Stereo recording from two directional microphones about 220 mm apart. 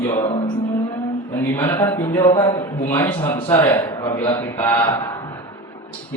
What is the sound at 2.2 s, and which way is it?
A man's voice, 20° left (ahead or behind).